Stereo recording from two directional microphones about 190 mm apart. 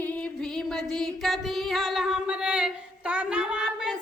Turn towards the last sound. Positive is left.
turn(degrees=-5)  # may be behind; listen again after turning